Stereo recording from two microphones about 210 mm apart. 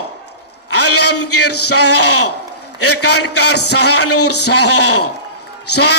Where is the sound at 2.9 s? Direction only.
90° left.